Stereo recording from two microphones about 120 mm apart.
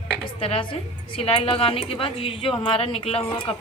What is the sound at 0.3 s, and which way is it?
Speech, 50° left (ahead or behind).